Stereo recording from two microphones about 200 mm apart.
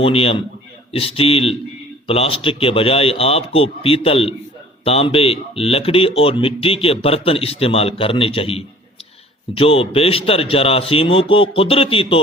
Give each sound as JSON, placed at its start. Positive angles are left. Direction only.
{"t": 0.0, "sound": "speech", "side_deg": 30}